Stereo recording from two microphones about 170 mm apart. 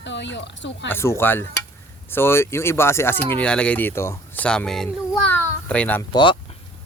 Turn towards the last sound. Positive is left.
turn(degrees=30)  # may be behind; listen again after turning